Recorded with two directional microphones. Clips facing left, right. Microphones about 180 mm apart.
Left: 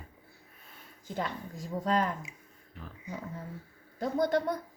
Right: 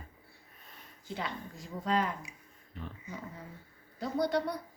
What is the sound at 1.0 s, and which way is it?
Speech, 45° left (ahead or behind).